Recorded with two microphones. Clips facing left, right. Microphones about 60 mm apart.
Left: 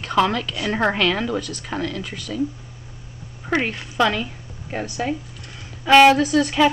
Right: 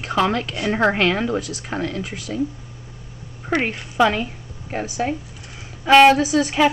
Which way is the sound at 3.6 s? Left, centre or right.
Centre.